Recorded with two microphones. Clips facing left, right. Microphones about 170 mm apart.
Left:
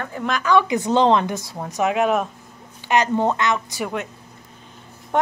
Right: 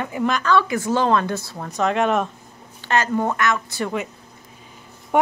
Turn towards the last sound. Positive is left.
turn(degrees=-10)  # may be behind; listen again after turning